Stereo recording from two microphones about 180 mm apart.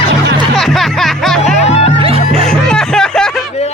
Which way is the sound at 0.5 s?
Centre (ahead or behind).